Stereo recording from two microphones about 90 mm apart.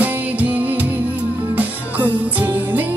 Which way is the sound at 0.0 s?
20° right (ahead or behind).